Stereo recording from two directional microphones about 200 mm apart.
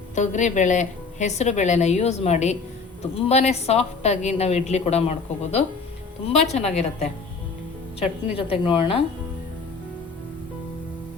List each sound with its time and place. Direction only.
0.2 s a woman's voice: 35° left (ahead or behind)